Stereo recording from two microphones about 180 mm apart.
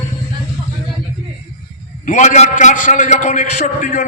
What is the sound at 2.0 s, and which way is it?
A man's voice, 40° left (ahead or behind).